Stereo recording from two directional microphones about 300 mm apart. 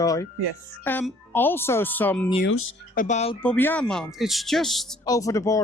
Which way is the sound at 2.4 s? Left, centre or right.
Left.